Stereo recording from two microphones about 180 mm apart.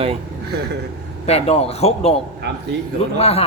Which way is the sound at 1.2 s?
35° left (ahead or behind).